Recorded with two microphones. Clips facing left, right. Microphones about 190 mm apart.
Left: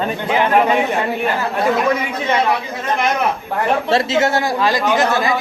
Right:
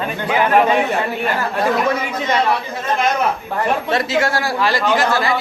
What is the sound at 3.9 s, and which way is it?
A man's voice, 25° left (ahead or behind).